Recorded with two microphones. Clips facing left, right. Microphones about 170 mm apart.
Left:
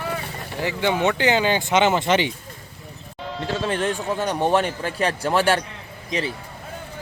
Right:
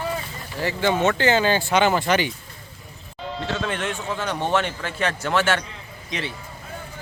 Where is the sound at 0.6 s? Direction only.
15° left (ahead or behind).